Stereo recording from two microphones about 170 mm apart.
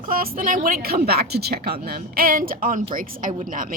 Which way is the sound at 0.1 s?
55° right (ahead or behind).